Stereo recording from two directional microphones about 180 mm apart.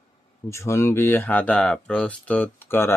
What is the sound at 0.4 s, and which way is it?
Speech, 15° left (ahead or behind).